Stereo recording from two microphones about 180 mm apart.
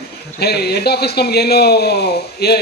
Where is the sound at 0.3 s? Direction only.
65° left (ahead or behind).